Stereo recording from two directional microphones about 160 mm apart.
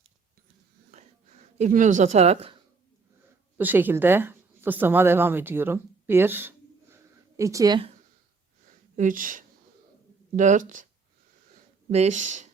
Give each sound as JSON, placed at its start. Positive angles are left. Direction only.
{"t": 0.9, "sound": "a sound", "side_deg": -45}
{"t": 3.6, "sound": "speech", "side_deg": -10}
{"t": 9.0, "sound": "speech", "side_deg": -55}
{"t": 11.9, "sound": "speech", "side_deg": -45}